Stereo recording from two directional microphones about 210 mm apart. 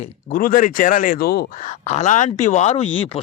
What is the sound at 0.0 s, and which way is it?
A man's voice, 40° left (ahead or behind).